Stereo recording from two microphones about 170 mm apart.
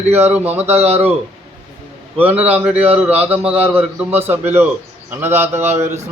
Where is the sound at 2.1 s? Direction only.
10° right (ahead or behind).